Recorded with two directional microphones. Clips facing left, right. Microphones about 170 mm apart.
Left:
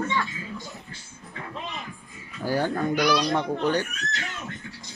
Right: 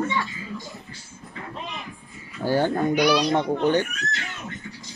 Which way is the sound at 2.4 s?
30° right (ahead or behind).